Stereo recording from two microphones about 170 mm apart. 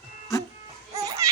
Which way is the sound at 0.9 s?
20° right (ahead or behind).